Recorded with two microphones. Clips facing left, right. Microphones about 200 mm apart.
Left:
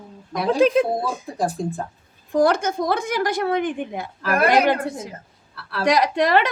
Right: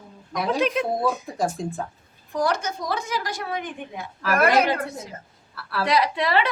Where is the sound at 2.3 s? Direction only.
50° left (ahead or behind).